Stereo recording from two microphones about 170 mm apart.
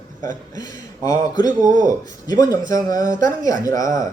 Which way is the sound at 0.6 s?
20° left (ahead or behind).